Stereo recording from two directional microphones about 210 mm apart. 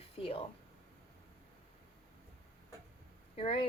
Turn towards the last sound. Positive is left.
turn(degrees=25)  # may be behind; listen again after turning